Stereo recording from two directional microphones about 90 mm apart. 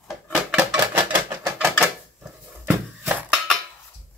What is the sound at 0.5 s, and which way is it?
Typewriter, 20° right (ahead or behind).